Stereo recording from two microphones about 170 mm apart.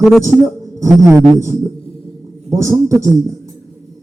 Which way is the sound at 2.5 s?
15° right (ahead or behind).